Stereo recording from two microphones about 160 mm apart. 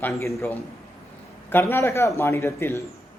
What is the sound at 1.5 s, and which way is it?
A man's voice, 15° left (ahead or behind).